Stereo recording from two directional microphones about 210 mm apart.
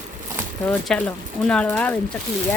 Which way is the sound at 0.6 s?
5° left (ahead or behind).